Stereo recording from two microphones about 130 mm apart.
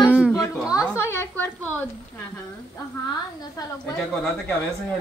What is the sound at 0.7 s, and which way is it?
Speech, 25° left (ahead or behind).